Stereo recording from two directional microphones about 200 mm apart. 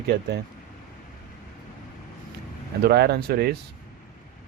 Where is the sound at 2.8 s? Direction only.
55° right (ahead or behind).